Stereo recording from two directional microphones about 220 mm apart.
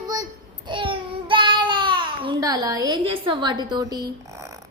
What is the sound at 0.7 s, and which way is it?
A child's voice, 20° right (ahead or behind).